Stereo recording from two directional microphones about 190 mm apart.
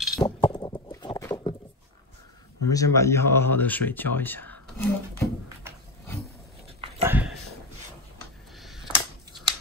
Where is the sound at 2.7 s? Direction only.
15° left (ahead or behind).